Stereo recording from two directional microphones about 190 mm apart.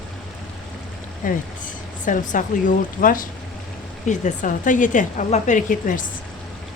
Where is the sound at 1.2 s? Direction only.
45° left (ahead or behind).